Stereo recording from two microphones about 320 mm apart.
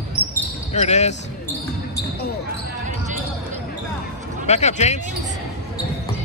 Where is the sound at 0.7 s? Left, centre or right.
Left.